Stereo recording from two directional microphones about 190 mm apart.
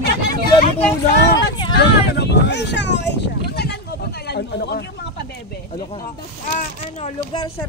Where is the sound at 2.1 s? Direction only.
60° left (ahead or behind).